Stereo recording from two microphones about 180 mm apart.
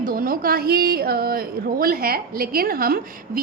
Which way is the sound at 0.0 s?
55° right (ahead or behind).